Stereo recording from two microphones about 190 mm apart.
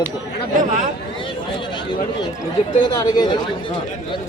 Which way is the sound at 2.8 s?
20° left (ahead or behind).